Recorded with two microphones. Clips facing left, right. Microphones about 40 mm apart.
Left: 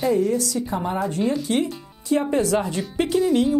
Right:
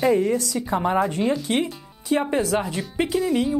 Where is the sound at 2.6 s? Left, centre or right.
Centre.